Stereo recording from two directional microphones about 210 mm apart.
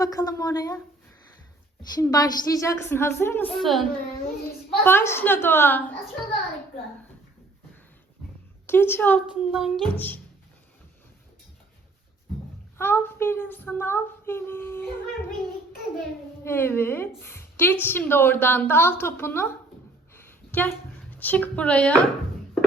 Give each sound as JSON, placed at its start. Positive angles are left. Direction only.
{"t": 0.0, "sound": "a woman's voice", "side_deg": 15}
{"t": 2.0, "sound": "a woman's voice", "side_deg": 20}
{"t": 8.6, "sound": "a woman's voice", "side_deg": 10}
{"t": 9.3, "sound": "speech", "side_deg": 0}
{"t": 12.7, "sound": "a woman's voice", "side_deg": 10}
{"t": 16.4, "sound": "a woman's voice", "side_deg": 10}
{"t": 20.1, "sound": "a sound", "side_deg": 10}